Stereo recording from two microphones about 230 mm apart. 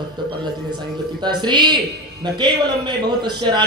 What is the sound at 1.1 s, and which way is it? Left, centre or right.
A man's voice, centre.